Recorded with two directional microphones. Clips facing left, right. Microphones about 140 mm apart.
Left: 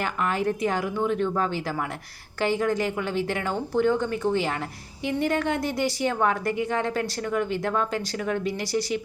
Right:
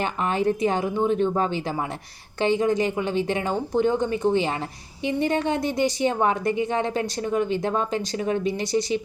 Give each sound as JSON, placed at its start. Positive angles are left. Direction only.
{"t": 0.0, "sound": "a woman's voice", "side_deg": -25}